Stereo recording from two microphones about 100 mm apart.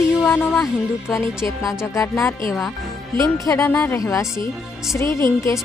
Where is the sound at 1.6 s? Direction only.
5° right (ahead or behind).